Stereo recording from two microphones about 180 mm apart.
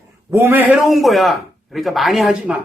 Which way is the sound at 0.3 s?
15° right (ahead or behind).